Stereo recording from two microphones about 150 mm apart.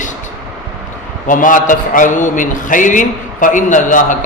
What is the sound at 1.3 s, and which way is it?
A man's voice, 60° left (ahead or behind).